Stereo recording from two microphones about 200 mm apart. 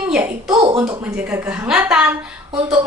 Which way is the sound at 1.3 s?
5° right (ahead or behind).